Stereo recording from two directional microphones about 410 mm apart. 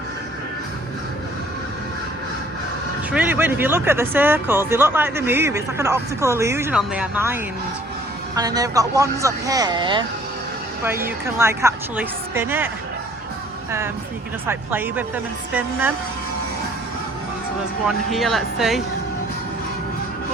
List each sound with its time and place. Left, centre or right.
3.1 s speech: centre
8.4 s speech: centre
17.8 s speech: centre